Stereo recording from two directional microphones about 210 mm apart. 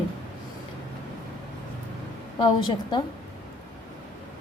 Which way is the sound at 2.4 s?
20° left (ahead or behind).